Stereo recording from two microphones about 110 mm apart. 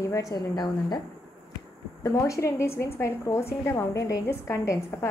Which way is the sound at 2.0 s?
30° left (ahead or behind).